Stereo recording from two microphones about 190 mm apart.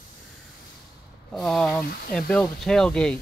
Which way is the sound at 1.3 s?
Centre (ahead or behind).